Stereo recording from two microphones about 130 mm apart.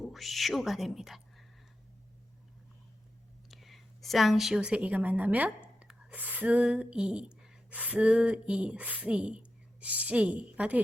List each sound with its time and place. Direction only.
0.0 s speech: centre (ahead or behind)
3.5 s a woman's voice: centre (ahead or behind)